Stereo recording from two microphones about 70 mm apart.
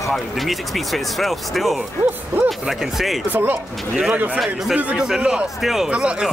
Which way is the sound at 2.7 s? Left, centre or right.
Centre.